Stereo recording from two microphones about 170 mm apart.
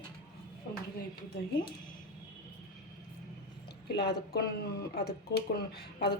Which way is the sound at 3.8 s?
70° left (ahead or behind).